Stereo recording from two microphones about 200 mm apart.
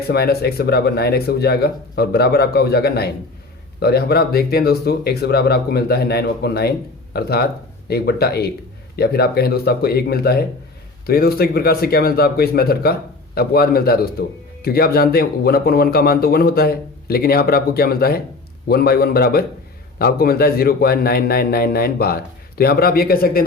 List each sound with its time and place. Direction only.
0.1 s speech: 50° left (ahead or behind)